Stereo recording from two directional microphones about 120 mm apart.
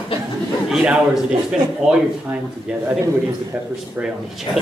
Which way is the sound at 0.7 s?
5° right (ahead or behind).